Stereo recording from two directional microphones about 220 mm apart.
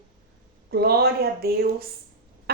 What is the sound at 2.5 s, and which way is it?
Chicken, 45° right (ahead or behind).